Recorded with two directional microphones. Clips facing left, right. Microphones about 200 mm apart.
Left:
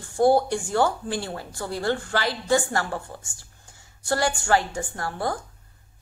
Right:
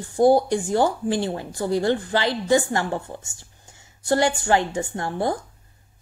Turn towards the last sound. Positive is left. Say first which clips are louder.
# right 4 dB
turn(degrees=-20)  # may be behind; listen again after turning